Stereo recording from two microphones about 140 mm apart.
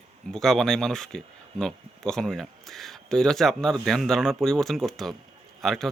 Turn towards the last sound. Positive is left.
turn(degrees=0)  # may be behind; listen again after turning